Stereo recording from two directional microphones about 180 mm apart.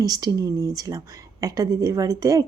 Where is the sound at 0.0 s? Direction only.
20° right (ahead or behind).